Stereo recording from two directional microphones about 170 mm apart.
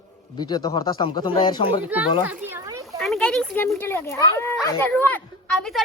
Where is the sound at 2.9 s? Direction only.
Centre (ahead or behind).